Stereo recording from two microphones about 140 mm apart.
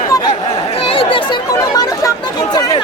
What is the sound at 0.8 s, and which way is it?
Chatter, 40° left (ahead or behind).